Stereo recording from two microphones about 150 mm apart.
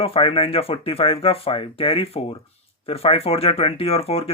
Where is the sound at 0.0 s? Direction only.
40° left (ahead or behind).